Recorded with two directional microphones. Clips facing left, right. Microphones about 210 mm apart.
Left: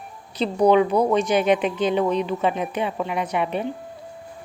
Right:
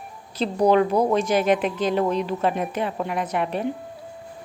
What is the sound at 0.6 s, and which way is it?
A woman's voice, centre (ahead or behind).